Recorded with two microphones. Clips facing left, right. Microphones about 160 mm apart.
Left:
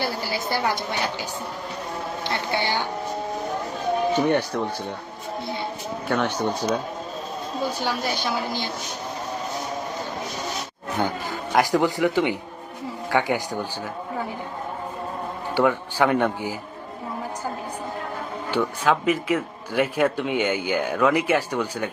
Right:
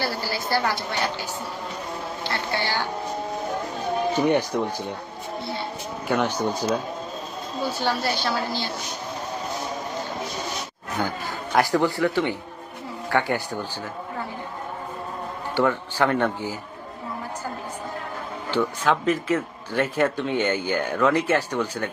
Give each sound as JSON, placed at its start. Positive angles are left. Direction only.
{"t": 0.0, "sound": "speech", "side_deg": 15}
{"t": 2.2, "sound": "speech", "side_deg": 20}
{"t": 4.1, "sound": "speech", "side_deg": -10}
{"t": 6.1, "sound": "speech", "side_deg": -10}
{"t": 7.6, "sound": "speech", "side_deg": 15}
{"t": 11.5, "sound": "speech", "side_deg": 15}
{"t": 15.5, "sound": "speech", "side_deg": 15}
{"t": 18.5, "sound": "speech", "side_deg": 10}